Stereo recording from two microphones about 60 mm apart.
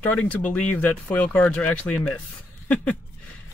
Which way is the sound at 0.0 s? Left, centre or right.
Left.